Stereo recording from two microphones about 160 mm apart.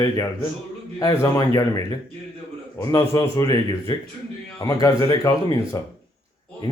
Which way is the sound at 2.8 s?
20° left (ahead or behind).